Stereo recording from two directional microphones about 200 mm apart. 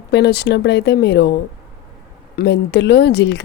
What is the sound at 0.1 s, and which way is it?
Speech, 55° left (ahead or behind).